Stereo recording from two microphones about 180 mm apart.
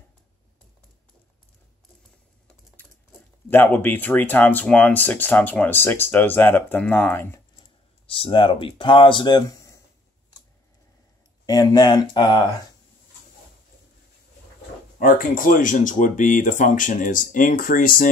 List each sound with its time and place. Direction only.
3.4 s speech: 10° left (ahead or behind)
8.1 s speech: 30° left (ahead or behind)
11.4 s speech: 20° left (ahead or behind)
15.0 s speech: 50° left (ahead or behind)